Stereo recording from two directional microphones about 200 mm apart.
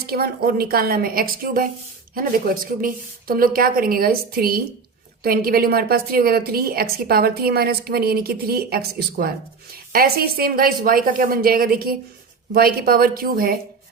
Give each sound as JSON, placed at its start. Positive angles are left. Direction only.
{"t": 0.1, "sound": "a woman's voice", "side_deg": -50}
{"t": 2.8, "sound": "a woman's voice", "side_deg": -45}